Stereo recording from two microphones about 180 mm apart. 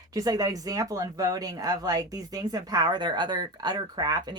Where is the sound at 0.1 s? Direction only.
20° right (ahead or behind).